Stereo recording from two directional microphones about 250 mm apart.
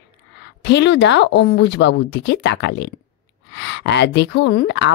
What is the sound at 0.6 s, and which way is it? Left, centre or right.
A woman's voice, left.